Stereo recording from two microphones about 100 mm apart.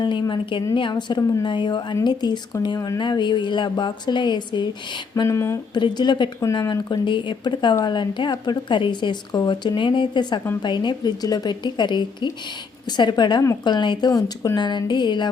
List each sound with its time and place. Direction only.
0.0 s speech: 50° left (ahead or behind)